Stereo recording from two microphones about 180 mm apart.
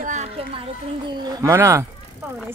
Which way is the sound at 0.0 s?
40° right (ahead or behind).